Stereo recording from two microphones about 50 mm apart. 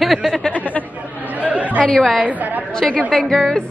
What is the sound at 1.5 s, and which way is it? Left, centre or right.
Chatter, right.